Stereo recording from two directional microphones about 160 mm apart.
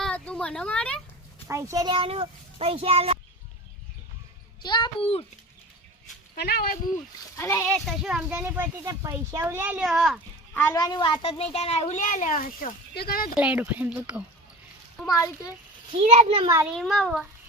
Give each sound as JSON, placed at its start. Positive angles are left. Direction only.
{"t": 0.0, "sound": "a sound", "side_deg": 5}
{"t": 1.5, "sound": "a child's voice", "side_deg": -15}
{"t": 4.6, "sound": "a child's voice", "side_deg": 30}
{"t": 6.3, "sound": "speech", "side_deg": 85}
{"t": 7.3, "sound": "a child's voice", "side_deg": 15}
{"t": 7.9, "sound": "speech", "side_deg": -5}
{"t": 10.5, "sound": "a woman's voice", "side_deg": 20}
{"t": 13.3, "sound": "speech", "side_deg": -10}
{"t": 15.0, "sound": "a child's voice", "side_deg": 25}
{"t": 15.9, "sound": "a child's voice", "side_deg": -40}
{"t": 16.7, "sound": "a child's voice", "side_deg": 5}